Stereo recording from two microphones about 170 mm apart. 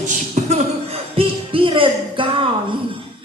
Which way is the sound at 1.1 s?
30° right (ahead or behind).